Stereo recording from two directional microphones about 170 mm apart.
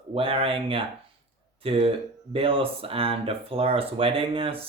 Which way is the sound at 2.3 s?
35° right (ahead or behind).